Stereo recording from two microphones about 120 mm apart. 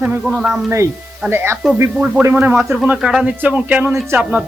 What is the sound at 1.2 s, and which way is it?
A man's voice, 20° right (ahead or behind).